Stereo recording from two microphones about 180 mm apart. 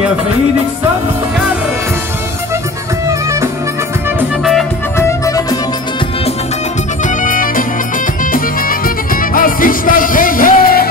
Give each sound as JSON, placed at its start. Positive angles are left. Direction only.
{"t": 3.1, "sound": "music", "side_deg": -15}
{"t": 4.9, "sound": "music", "side_deg": 15}
{"t": 7.2, "sound": "music", "side_deg": 50}